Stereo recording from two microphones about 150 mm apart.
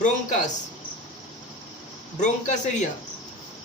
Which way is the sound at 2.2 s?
50° left (ahead or behind).